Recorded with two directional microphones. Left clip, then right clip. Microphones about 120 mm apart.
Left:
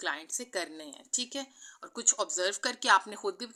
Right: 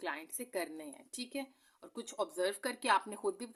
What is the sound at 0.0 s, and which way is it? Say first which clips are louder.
A woman's voice: left 6 dB; 30° right (ahead or behind).